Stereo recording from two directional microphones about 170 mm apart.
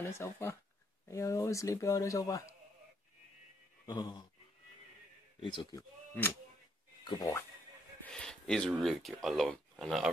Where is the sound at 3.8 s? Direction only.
25° left (ahead or behind).